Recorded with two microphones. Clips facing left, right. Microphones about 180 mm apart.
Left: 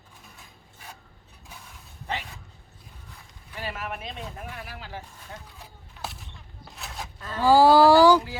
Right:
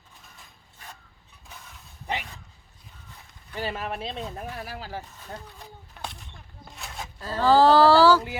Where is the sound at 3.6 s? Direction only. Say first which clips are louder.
Right 3 dB; 30° right (ahead or behind).